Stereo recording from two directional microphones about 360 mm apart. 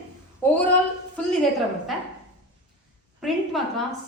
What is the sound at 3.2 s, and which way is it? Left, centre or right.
Speech, centre.